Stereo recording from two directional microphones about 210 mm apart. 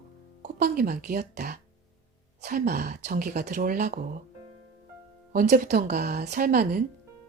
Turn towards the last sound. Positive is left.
turn(degrees=-45)  # may be behind; listen again after turning